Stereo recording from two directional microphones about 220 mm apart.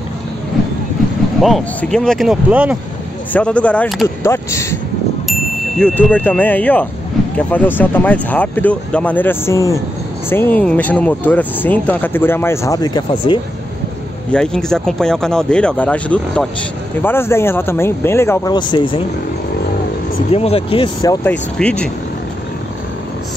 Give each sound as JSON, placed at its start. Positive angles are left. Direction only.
{"t": 1.4, "sound": "speech", "side_deg": 0}
{"t": 3.3, "sound": "speech", "side_deg": 5}
{"t": 14.3, "sound": "speech", "side_deg": 5}
{"t": 20.2, "sound": "speech", "side_deg": 25}